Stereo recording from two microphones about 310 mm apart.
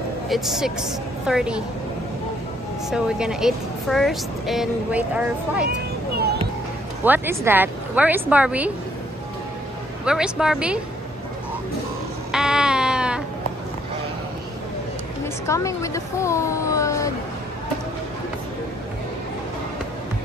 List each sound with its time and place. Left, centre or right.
0.3 s speech: centre
2.9 s speech: centre
5.7 s a sound: right
7.1 s speech: centre
10.0 s speech: centre
12.3 s a sound: centre
15.4 s a woman's voice: centre